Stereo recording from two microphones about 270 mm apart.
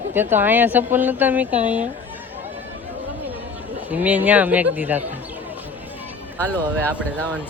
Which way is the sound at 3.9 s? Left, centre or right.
Centre.